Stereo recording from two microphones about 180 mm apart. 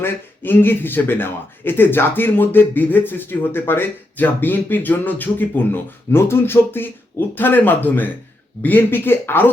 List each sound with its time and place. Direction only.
0.0 s speech: 10° left (ahead or behind)